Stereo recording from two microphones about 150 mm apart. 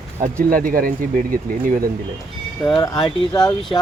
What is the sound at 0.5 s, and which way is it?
Speech, 65° right (ahead or behind).